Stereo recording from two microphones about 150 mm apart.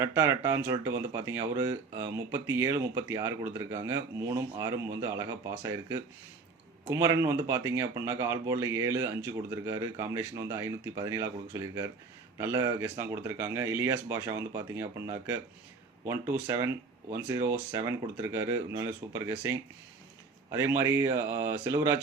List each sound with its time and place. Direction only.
0.0 s speech: 15° right (ahead or behind)